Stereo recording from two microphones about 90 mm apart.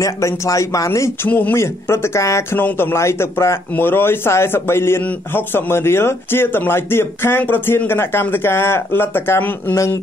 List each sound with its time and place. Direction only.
0.0 s speech: 35° left (ahead or behind)
1.3 s a man's voice: 20° left (ahead or behind)
1.6 s a man's voice: 30° left (ahead or behind)